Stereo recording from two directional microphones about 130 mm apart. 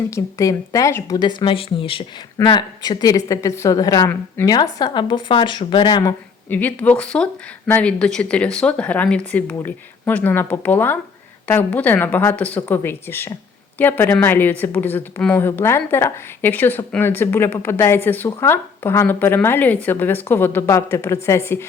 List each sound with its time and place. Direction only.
0.1 s speech: 25° left (ahead or behind)
6.5 s a woman's voice: 15° left (ahead or behind)